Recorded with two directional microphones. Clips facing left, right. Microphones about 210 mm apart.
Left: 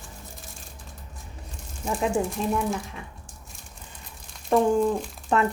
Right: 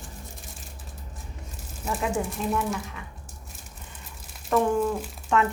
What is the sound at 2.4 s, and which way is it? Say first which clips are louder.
Speech: left 2 dB; 35° left (ahead or behind).